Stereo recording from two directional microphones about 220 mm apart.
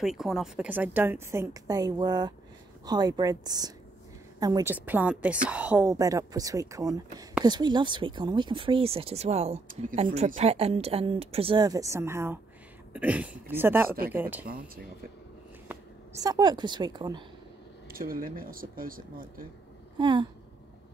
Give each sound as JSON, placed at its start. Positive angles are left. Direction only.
{"t": 0.0, "sound": "a woman's voice", "side_deg": 0}
{"t": 15.7, "sound": "a woman's voice", "side_deg": -15}
{"t": 17.8, "sound": "speech", "side_deg": -40}
{"t": 20.0, "sound": "speech", "side_deg": -20}